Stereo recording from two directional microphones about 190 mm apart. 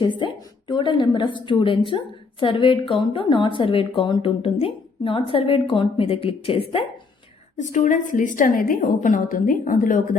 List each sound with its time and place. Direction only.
0.2 s a sound: 25° left (ahead or behind)
1.5 s a woman's voice: 25° left (ahead or behind)
7.6 s a woman's voice: 40° left (ahead or behind)